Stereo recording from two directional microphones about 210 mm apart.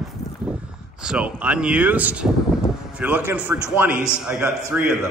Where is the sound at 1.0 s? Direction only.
5° right (ahead or behind).